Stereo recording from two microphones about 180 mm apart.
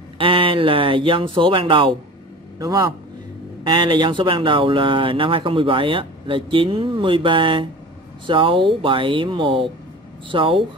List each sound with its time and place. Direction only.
0.2 s speech: 30° right (ahead or behind)